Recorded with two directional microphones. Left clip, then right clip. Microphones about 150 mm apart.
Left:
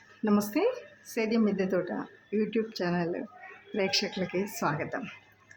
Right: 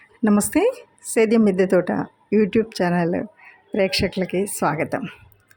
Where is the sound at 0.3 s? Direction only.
50° right (ahead or behind).